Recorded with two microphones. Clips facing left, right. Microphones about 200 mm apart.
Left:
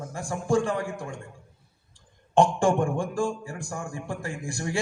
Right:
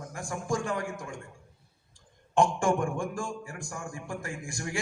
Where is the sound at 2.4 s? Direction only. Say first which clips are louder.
Left 4 dB; 30° left (ahead or behind).